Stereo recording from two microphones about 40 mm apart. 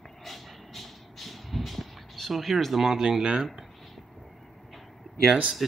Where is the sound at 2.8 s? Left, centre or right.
Centre.